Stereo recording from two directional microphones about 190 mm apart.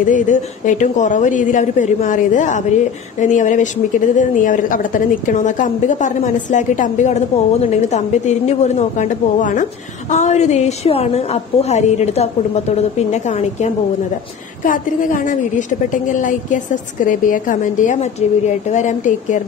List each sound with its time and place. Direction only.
0.0 s a woman's voice: 40° left (ahead or behind)